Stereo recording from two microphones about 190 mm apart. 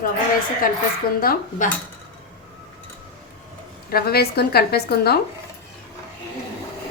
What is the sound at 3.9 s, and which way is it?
A woman's voice, 55° left (ahead or behind).